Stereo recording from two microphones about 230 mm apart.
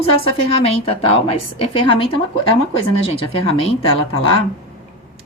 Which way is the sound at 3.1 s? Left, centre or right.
Left.